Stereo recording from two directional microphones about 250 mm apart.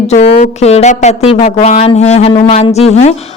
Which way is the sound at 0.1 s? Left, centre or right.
Left.